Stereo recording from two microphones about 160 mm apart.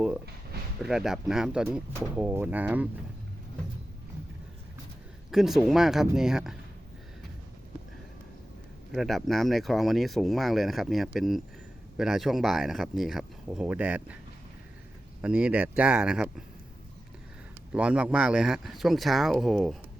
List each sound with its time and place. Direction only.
0.8 s speech: centre (ahead or behind)
5.3 s speech: centre (ahead or behind)
8.9 s speech: centre (ahead or behind)
15.2 s speech: 5° right (ahead or behind)
17.7 s speech: 5° right (ahead or behind)